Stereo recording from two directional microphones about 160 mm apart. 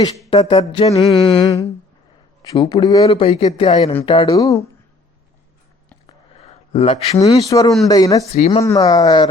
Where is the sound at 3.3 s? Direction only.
35° left (ahead or behind); by 4.6 s 20° left (ahead or behind).